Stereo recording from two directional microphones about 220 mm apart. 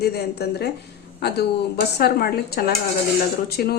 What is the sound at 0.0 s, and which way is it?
Speech, 45° left (ahead or behind).